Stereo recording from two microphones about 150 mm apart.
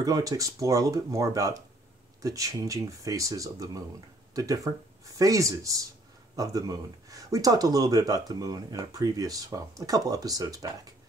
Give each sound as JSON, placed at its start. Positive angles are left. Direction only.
{"t": 0.0, "sound": "speech", "side_deg": -25}